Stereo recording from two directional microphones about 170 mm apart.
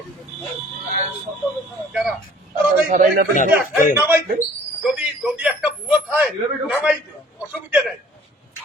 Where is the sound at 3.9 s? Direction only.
15° right (ahead or behind).